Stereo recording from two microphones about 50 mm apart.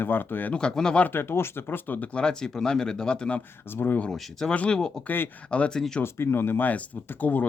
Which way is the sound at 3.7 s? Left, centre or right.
Left.